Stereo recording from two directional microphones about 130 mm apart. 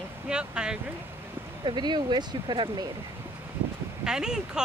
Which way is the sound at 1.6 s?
35° right (ahead or behind).